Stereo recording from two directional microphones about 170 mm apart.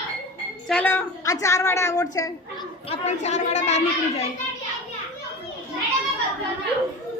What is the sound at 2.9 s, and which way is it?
A woman's voice, 40° left (ahead or behind).